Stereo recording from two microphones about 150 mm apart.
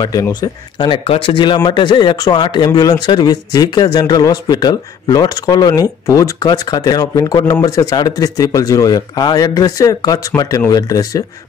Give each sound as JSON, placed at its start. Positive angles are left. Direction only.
{"t": 0.0, "sound": "speech", "side_deg": 25}